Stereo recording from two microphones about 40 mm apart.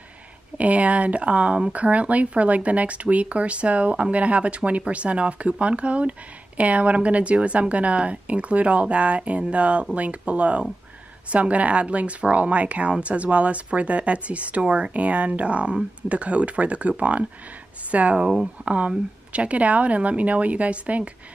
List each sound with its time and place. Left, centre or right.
0.6 s speech: right